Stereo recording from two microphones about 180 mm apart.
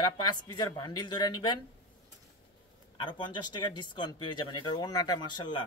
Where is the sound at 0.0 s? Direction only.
25° left (ahead or behind).